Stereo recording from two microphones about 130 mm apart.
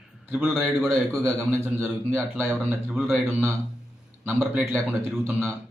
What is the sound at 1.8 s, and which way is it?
A man's voice, 5° left (ahead or behind).